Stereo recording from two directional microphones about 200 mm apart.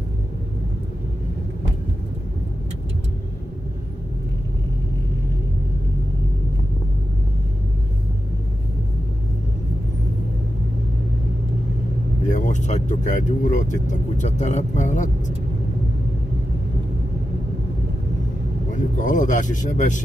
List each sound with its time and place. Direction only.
12.3 s speech: 35° left (ahead or behind)
18.7 s speech: 40° left (ahead or behind)